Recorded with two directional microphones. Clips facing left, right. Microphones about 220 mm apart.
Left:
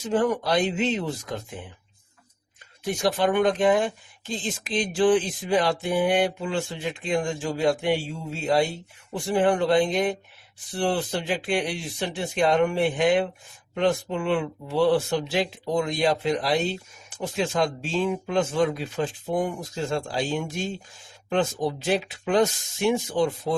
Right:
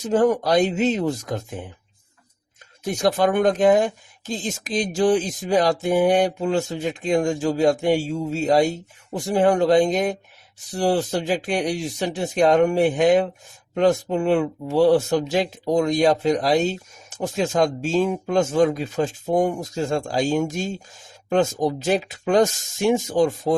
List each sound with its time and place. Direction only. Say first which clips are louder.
0.0 s speech: right 5 dB; 45° right (ahead or behind)
2.8 s speech: right 3 dB; 40° right (ahead or behind)